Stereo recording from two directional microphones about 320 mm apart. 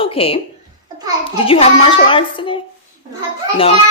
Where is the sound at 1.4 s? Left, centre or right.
Centre.